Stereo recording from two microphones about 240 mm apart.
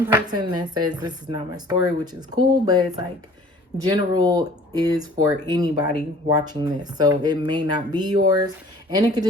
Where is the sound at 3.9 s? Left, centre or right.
Centre.